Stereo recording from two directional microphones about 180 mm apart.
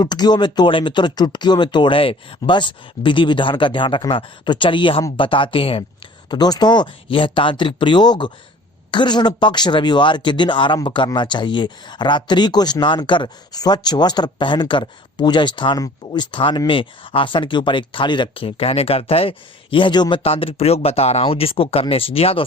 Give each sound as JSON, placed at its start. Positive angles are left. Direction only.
{"t": 0.0, "sound": "speech", "side_deg": 25}